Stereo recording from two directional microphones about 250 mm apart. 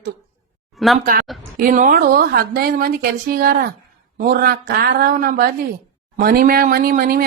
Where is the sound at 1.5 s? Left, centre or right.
Right.